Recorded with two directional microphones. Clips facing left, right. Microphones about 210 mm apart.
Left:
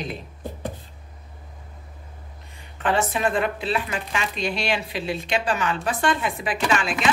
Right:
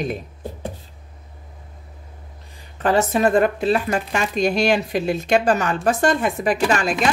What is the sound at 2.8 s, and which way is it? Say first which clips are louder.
Speech: right 5 dB; 40° right (ahead or behind).